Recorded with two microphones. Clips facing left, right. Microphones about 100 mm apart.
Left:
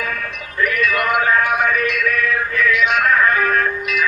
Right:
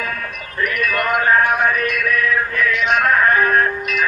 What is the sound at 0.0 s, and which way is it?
Music, 40° right (ahead or behind).